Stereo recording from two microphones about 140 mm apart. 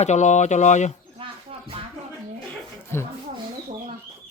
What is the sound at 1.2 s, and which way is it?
Music, 40° right (ahead or behind).